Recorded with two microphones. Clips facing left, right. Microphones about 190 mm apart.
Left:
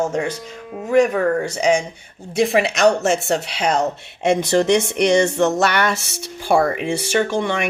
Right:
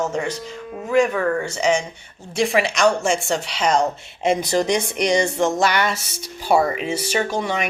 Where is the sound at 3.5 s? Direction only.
60° left (ahead or behind).